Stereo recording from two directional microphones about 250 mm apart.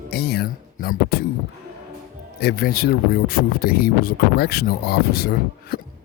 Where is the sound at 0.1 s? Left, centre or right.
Left.